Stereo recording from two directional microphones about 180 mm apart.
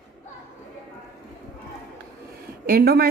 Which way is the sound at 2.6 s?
60° right (ahead or behind).